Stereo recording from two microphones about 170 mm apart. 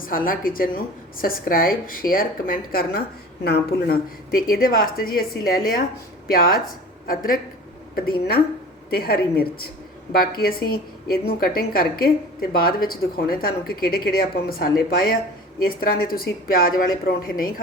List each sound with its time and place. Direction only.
0.0 s a woman's voice: 55° left (ahead or behind)
8.9 s a woman's voice: 65° left (ahead or behind)